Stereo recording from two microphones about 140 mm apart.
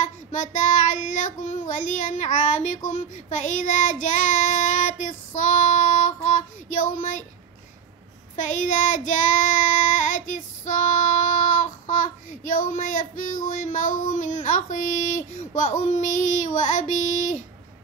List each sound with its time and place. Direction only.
0.0 s child singing: 65° left (ahead or behind)
8.5 s child singing: 70° left (ahead or behind)